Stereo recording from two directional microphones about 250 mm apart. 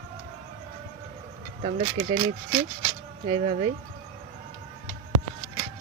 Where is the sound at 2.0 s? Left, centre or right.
Right.